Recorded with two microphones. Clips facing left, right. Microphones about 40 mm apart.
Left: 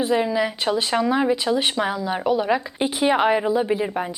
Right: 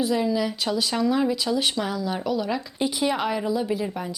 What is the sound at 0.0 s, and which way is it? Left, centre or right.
Speech, left.